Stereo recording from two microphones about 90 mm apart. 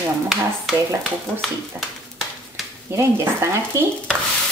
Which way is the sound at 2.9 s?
30° right (ahead or behind).